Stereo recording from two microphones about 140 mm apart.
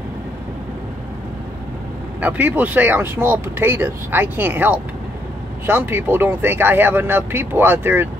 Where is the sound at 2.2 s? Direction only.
10° right (ahead or behind).